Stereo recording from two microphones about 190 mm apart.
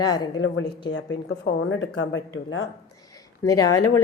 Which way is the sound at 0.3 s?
90° left.